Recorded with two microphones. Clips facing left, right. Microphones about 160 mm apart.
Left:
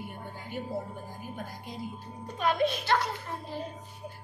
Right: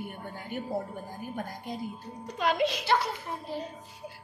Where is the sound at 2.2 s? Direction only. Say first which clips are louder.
Even; 90° right.